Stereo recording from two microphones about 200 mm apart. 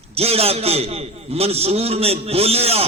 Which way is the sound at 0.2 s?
30° right (ahead or behind).